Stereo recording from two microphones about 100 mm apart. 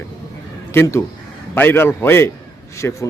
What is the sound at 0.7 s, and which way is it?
A man's voice, 25° left (ahead or behind).